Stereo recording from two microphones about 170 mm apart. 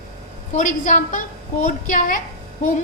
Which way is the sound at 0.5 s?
45° left (ahead or behind).